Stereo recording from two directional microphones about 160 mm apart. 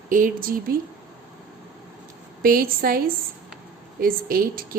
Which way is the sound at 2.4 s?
65° right (ahead or behind).